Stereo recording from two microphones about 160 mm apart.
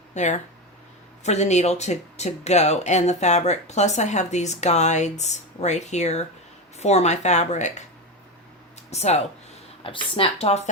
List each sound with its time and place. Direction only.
0.1 s speech: 50° left (ahead or behind)
8.9 s speech: 45° left (ahead or behind)